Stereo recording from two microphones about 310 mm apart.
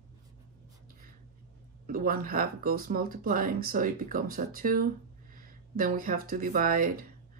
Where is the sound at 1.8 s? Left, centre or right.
Right.